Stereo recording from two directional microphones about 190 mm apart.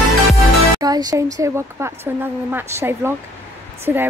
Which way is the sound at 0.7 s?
20° right (ahead or behind).